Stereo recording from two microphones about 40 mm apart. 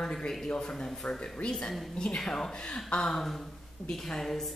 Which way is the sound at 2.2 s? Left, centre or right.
Centre.